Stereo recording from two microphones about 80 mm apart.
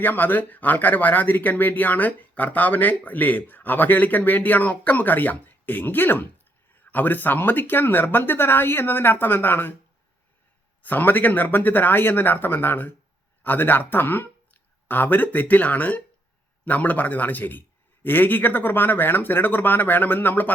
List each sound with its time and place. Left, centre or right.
0.0 s speech: left
10.8 s speech: left